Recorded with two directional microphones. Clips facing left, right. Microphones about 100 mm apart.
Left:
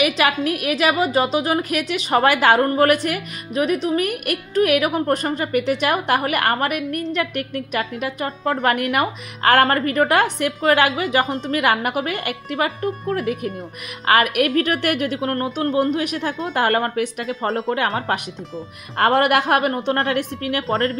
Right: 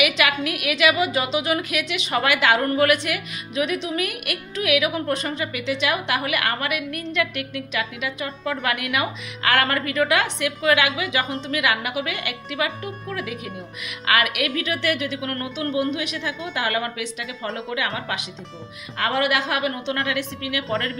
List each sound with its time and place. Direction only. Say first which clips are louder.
0.0 s a woman's voice: left 3 dB; 35° left (ahead or behind)